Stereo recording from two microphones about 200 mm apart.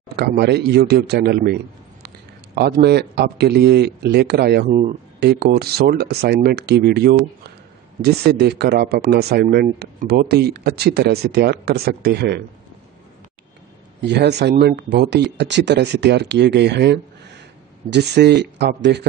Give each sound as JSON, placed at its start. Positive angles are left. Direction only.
{"t": 0.1, "sound": "a man's voice", "side_deg": -55}
{"t": 4.6, "sound": "speech", "side_deg": -35}
{"t": 5.2, "sound": "speech", "side_deg": -50}
{"t": 14.0, "sound": "speech", "side_deg": -55}